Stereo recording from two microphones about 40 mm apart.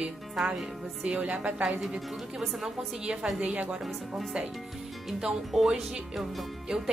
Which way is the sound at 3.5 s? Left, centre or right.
Right.